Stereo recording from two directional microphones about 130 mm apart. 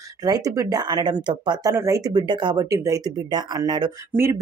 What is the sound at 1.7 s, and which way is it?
Speech, 25° right (ahead or behind).